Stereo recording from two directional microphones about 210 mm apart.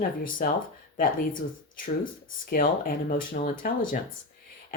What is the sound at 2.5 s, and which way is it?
Speech, 45° left (ahead or behind).